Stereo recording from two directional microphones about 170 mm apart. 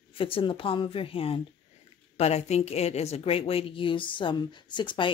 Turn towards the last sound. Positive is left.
turn(degrees=30)  # may be behind; listen again after turning